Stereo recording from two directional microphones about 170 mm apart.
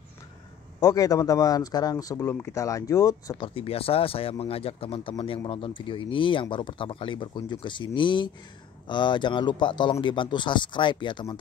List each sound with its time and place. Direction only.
0.7 s a man's voice: 20° left (ahead or behind)